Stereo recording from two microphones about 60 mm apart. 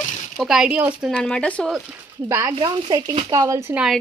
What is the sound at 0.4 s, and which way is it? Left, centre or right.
Speech, centre.